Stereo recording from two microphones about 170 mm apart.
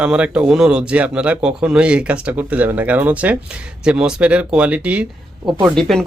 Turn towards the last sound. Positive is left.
turn(degrees=0)  # may be behind; listen again after turning